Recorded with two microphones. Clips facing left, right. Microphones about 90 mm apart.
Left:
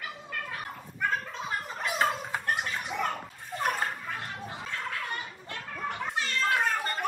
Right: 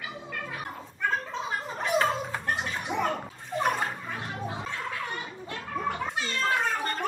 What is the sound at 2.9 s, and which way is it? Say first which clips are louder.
Bathtub: right 5 dB; 40° right (ahead or behind).